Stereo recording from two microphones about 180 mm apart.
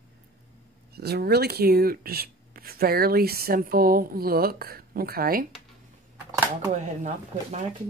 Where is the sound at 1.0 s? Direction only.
60° right (ahead or behind).